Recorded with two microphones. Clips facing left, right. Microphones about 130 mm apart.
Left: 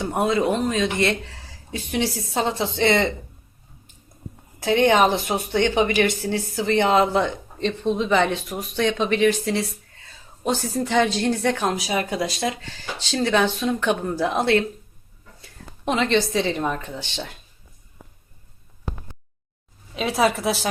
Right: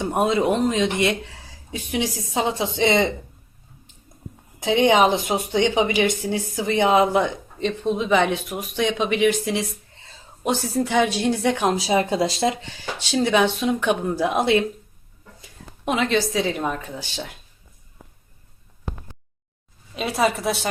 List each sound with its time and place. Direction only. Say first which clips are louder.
0.0 s a woman's voice: right 1 dB; 20° right (ahead or behind)
4.6 s a woman's voice: even; 15° right (ahead or behind)
9.9 s a sound: right 1 dB; 25° right (ahead or behind)
10.4 s a woman's voice: right 1 dB; 15° right (ahead or behind)
15.8 s a woman's voice: left 1 dB; 5° right (ahead or behind)
19.9 s a woman's voice: left 1 dB; centre (ahead or behind)